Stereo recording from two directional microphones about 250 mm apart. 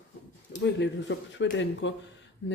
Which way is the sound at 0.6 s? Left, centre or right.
Left.